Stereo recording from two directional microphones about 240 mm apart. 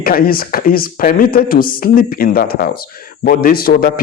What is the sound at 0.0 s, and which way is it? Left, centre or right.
Speech, left.